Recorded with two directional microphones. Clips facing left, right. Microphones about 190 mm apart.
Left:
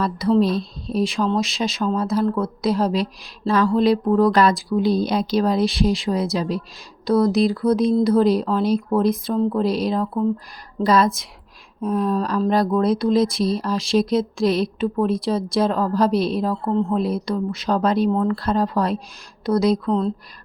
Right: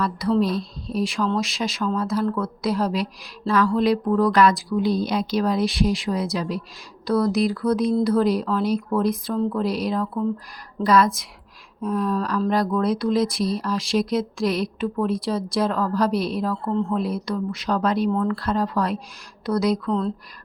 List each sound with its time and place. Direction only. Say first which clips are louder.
0.0 s speech: left 3 dB; 25° left (ahead or behind)